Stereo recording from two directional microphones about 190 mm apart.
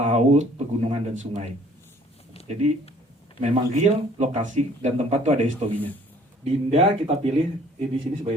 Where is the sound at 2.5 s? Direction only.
35° right (ahead or behind).